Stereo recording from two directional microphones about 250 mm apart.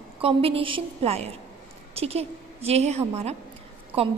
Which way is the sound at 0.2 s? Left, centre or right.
Right.